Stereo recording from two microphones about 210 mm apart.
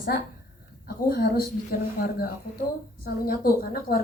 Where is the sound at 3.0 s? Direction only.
45° left (ahead or behind).